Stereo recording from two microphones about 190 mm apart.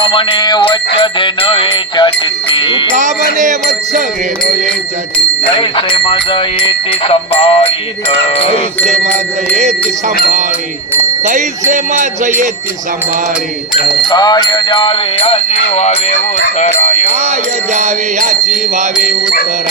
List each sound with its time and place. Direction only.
0.0 s music: 25° left (ahead or behind)
2.9 s music: 40° right (ahead or behind)
5.5 s music: 25° left (ahead or behind)
11.3 s music: 40° right (ahead or behind)
14.1 s music: 20° left (ahead or behind); by 16.2 s 40° left (ahead or behind)
16.6 s jingle bell: 35° left (ahead or behind)
17.7 s music: 40° right (ahead or behind)